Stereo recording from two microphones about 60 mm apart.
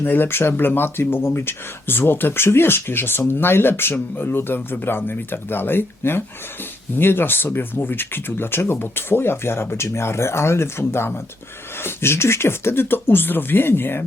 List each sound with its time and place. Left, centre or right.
0.0 s speech: left